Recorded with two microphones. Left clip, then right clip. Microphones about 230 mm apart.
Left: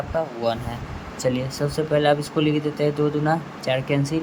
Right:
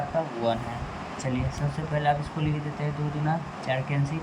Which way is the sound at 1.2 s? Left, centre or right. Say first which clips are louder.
Left 10 dB; left.